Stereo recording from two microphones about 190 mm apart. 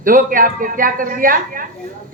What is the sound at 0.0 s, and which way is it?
Speech, 45° right (ahead or behind).